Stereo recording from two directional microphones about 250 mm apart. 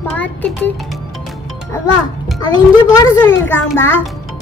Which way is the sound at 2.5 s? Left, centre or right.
Centre.